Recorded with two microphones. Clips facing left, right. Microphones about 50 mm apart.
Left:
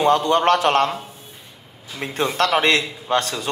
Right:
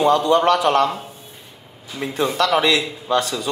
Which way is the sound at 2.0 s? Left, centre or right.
Left.